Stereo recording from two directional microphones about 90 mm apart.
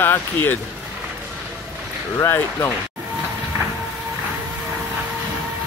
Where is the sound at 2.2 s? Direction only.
30° left (ahead or behind).